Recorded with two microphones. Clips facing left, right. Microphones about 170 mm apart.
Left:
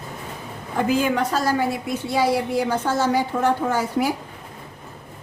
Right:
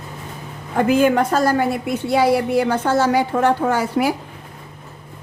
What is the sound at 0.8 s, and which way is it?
A woman's voice, 55° right (ahead or behind).